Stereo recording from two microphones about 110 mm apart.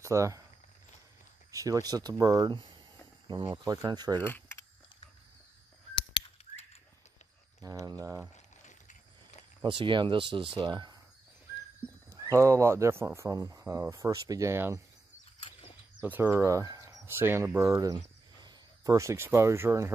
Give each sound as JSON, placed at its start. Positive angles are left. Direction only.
{"t": 0.0, "sound": "speech", "side_deg": -25}
{"t": 1.5, "sound": "speech", "side_deg": -30}
{"t": 4.2, "sound": "camera", "side_deg": 20}
{"t": 7.8, "sound": "speech", "side_deg": -35}
{"t": 8.6, "sound": "a sound", "side_deg": 90}
{"t": 9.6, "sound": "speech", "side_deg": -50}
{"t": 12.2, "sound": "speech", "side_deg": -25}
{"t": 16.0, "sound": "speech", "side_deg": -20}
{"t": 17.0, "sound": "speech", "side_deg": -20}
{"t": 17.9, "sound": "speech", "side_deg": -40}